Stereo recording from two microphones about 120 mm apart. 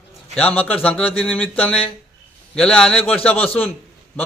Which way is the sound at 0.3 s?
15° left (ahead or behind).